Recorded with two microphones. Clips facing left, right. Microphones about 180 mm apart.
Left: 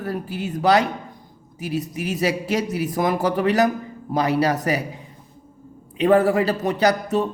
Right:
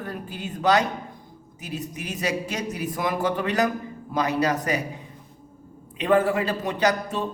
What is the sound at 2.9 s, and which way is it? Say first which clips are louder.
A man's voice: left 3 dB; 40° left (ahead or behind).